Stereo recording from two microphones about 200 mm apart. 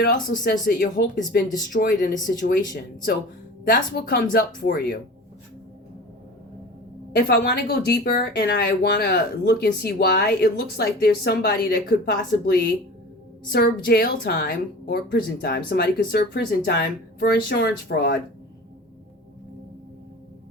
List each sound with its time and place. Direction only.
0.0 s a woman's voice: 45° left (ahead or behind)
7.2 s a woman's voice: 55° left (ahead or behind)